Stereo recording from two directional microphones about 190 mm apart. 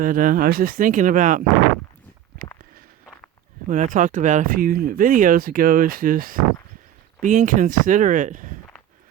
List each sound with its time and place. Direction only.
0.0 s speech: 45° right (ahead or behind)
3.7 s speech: 45° right (ahead or behind)